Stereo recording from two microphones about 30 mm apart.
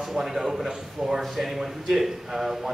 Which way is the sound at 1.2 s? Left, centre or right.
Centre.